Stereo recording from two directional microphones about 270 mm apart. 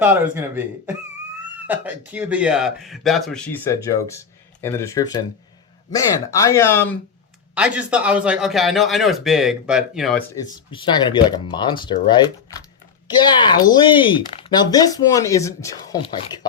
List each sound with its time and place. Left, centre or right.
0.0 s speech: centre
7.5 s speech: centre
10.3 s speech: centre